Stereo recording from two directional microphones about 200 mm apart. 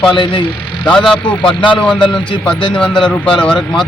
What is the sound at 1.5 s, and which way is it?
Speech, 25° left (ahead or behind).